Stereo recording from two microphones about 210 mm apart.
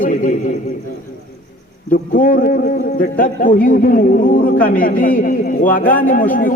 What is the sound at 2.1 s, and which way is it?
A man's voice, 40° left (ahead or behind).